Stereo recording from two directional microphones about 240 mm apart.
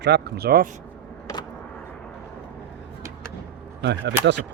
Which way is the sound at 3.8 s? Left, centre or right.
Right.